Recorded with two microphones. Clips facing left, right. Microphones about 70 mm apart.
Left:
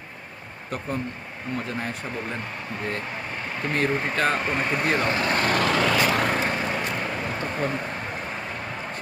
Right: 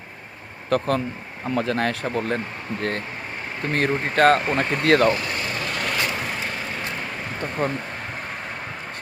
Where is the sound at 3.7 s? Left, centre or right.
Right.